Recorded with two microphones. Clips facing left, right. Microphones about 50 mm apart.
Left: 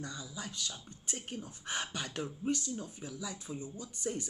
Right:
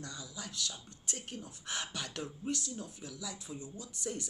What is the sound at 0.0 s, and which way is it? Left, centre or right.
Speech, centre.